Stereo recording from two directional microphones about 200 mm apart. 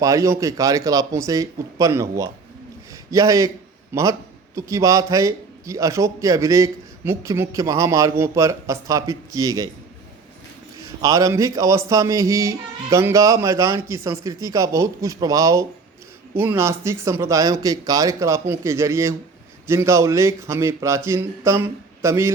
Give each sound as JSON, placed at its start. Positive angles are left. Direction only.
{"t": 0.0, "sound": "a man's voice", "side_deg": -15}
{"t": 10.8, "sound": "a man's voice", "side_deg": -15}